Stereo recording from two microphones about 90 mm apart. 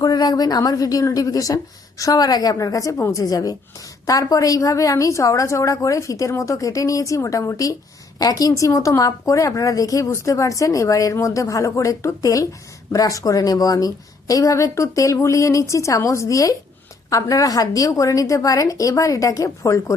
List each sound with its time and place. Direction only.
0.0 s a woman's voice: 50° left (ahead or behind); by 19.8 s 35° left (ahead or behind)